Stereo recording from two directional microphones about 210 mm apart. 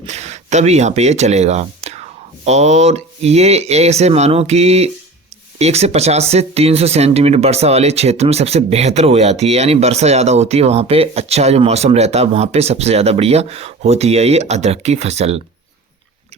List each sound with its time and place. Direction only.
0.0 s speech: 30° right (ahead or behind)